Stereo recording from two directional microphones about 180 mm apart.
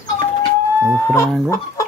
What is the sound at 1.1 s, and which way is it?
Speech, 5° left (ahead or behind).